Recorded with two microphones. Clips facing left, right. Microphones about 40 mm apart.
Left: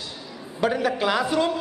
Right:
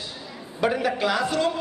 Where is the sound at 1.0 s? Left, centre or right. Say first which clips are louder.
Left 2 dB; centre.